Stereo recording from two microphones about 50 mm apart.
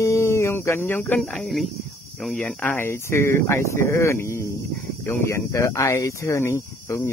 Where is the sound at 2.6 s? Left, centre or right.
Left.